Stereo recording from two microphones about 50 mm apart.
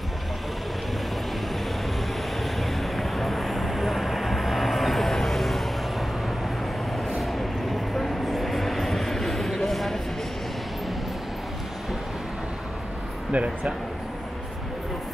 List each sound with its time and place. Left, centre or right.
2.6 s vehicle: centre
13.3 s speech: right